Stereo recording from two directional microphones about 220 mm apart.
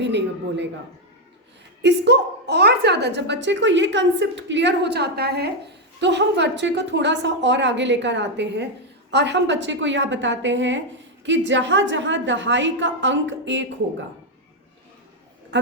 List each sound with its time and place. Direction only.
0.0 s a man's voice: 50° right (ahead or behind)
1.8 s a woman's voice: 50° right (ahead or behind)